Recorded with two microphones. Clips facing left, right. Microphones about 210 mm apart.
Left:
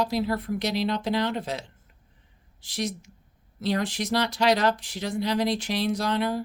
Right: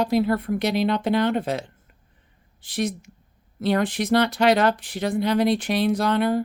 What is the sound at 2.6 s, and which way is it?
Speech, 55° right (ahead or behind).